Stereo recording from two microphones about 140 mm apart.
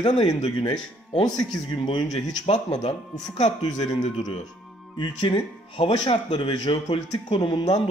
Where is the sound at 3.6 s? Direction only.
30° left (ahead or behind).